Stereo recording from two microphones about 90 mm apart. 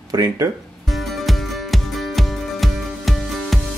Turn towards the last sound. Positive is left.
turn(degrees=0)  # may be behind; listen again after turning